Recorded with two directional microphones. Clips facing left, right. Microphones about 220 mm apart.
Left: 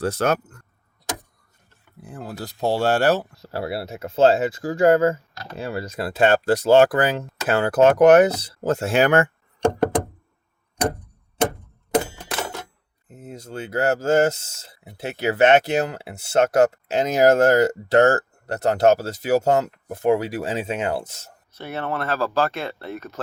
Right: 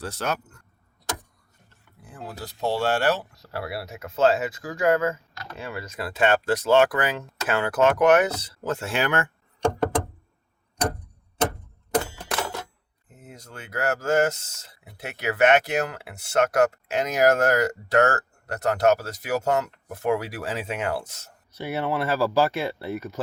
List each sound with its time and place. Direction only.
0.0 s speech: 50° left (ahead or behind)
2.4 s speech: 40° left (ahead or behind)
3.3 s speech: 25° left (ahead or behind); by 9.3 s 45° left (ahead or behind)
13.2 s speech: 30° left (ahead or behind)
21.5 s speech: 10° right (ahead or behind)